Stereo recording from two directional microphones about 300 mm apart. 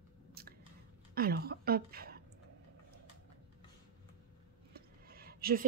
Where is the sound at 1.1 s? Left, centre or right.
Right.